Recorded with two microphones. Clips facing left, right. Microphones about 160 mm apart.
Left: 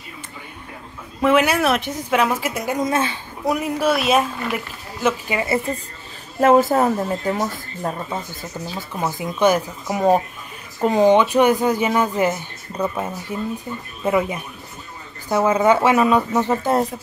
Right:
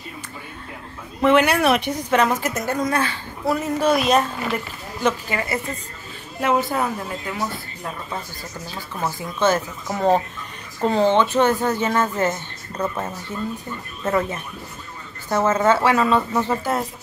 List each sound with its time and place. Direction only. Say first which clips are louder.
1.2 s speech: even; 5° left (ahead or behind)
5.3 s a woman's voice: left 4 dB; 20° left (ahead or behind)
6.4 s a woman's voice: left 7 dB; 45° left (ahead or behind)
8.1 s speech: left 3 dB; 20° left (ahead or behind)